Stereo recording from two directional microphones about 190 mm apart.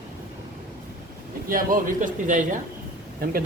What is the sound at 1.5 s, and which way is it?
A man's voice, 45° right (ahead or behind).